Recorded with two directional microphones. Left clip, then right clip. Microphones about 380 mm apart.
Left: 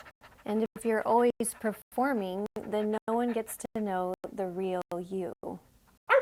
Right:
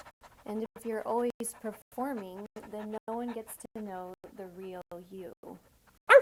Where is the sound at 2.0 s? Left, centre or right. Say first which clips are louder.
Left 8 dB; left.